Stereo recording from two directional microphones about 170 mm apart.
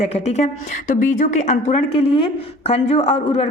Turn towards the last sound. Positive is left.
turn(degrees=40)  # may be behind; listen again after turning